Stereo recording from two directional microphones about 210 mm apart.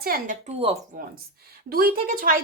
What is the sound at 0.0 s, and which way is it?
Speech, 40° right (ahead or behind).